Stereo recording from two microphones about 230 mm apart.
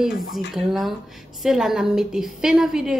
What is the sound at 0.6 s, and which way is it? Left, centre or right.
A woman's voice, centre.